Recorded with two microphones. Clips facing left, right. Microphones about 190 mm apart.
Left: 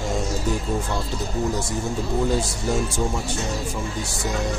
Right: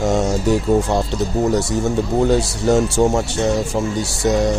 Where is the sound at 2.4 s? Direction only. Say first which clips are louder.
Right 8 dB; 75° right (ahead or behind).